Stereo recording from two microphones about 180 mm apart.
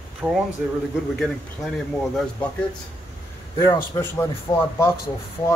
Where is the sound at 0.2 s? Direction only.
10° right (ahead or behind).